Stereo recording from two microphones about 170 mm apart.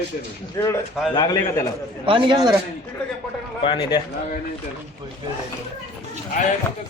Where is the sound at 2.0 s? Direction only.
30° right (ahead or behind).